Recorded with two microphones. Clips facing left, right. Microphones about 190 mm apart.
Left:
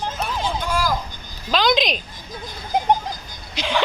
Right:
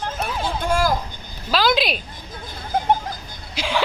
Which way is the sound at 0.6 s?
50° right (ahead or behind).